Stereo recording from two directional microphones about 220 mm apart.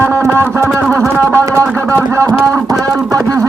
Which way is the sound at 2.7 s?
15° right (ahead or behind).